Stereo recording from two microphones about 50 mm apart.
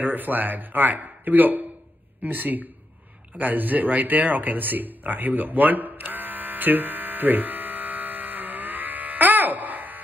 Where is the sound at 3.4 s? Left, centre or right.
Right.